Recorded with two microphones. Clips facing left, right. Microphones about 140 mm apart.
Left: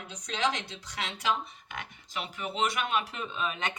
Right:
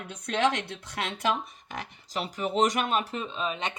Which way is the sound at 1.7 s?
35° right (ahead or behind).